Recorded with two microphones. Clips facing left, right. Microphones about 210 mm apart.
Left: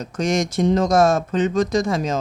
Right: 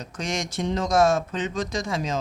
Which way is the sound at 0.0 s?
40° left (ahead or behind).